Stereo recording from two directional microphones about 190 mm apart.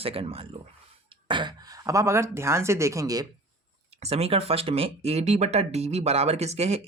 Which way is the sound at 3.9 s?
35° right (ahead or behind).